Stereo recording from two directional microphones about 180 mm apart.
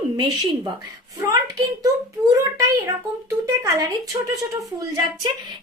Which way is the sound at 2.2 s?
10° right (ahead or behind).